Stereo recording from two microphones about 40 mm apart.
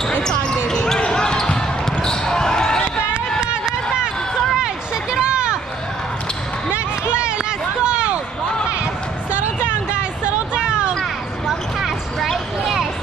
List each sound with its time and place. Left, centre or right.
0.2 s basketball bounce: centre
3.3 s run: centre
5.1 s a sound: right
6.7 s a sound: right
10.2 s hubbub: right
11.4 s basketball bounce: centre